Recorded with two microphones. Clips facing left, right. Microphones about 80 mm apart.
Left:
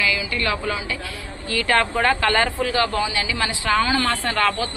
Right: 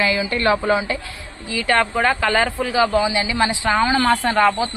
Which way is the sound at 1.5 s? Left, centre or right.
Centre.